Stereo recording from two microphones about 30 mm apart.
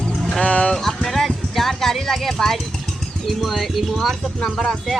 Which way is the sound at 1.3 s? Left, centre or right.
Centre.